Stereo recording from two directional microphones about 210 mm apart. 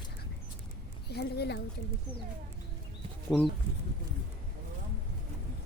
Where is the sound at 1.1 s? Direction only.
50° left (ahead or behind).